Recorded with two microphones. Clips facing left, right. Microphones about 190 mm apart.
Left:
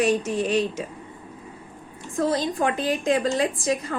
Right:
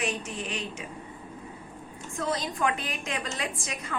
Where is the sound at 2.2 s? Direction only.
35° left (ahead or behind).